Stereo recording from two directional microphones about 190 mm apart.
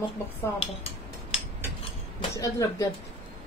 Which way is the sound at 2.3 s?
15° left (ahead or behind).